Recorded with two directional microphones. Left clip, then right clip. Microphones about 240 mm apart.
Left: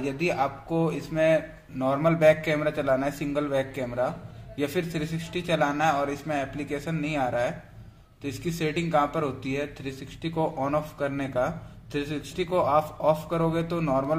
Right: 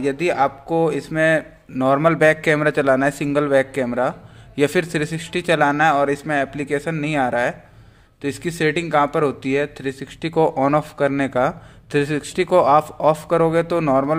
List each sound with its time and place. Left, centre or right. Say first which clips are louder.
0.0 s a man's voice: right 8 dB; right